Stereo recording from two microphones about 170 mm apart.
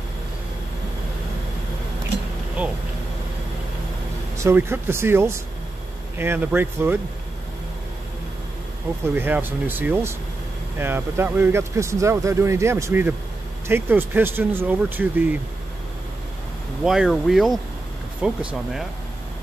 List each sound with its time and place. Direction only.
4.4 s speech: 15° right (ahead or behind)
9.0 s speech: 15° right (ahead or behind)
16.8 s speech: 5° right (ahead or behind)